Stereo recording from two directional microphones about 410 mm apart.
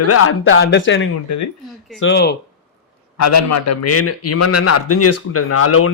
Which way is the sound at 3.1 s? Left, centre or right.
Left.